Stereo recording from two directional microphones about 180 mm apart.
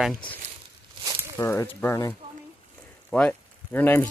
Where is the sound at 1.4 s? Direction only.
15° left (ahead or behind).